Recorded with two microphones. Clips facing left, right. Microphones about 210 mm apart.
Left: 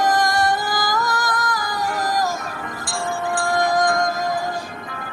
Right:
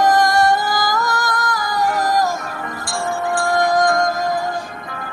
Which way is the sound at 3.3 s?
65° right (ahead or behind).